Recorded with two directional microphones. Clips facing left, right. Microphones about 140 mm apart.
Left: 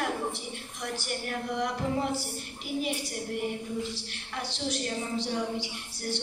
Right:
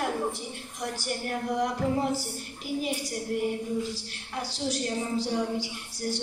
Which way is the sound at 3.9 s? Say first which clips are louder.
Right 2 dB; 40° right (ahead or behind).